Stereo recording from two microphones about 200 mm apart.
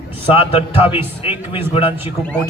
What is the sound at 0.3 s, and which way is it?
A man's voice, 30° left (ahead or behind).